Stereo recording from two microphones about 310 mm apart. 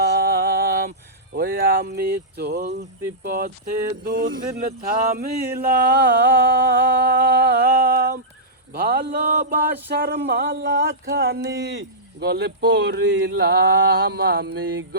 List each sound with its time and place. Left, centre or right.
0.1 s music: right
1.3 s speech: right
8.7 s a sound: right